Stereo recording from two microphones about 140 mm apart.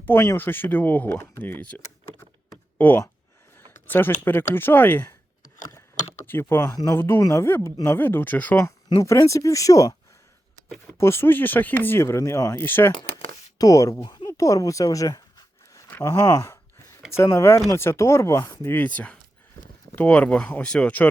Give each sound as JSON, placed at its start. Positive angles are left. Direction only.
{"t": 0.0, "sound": "speech", "side_deg": 15}
{"t": 6.2, "sound": "speech", "side_deg": 15}
{"t": 9.0, "sound": "speech", "side_deg": 20}
{"t": 10.9, "sound": "speech", "side_deg": 20}
{"t": 12.9, "sound": "speech", "side_deg": 35}
{"t": 14.3, "sound": "a sound", "side_deg": 25}
{"t": 15.9, "sound": "speech", "side_deg": 20}